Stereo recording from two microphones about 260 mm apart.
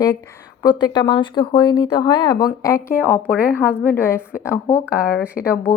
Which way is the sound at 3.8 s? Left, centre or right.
Centre.